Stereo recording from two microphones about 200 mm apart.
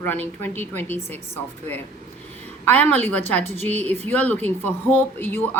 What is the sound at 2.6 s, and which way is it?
Speech, 10° left (ahead or behind).